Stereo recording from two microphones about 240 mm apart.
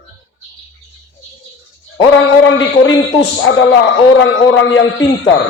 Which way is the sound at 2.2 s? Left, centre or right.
Left.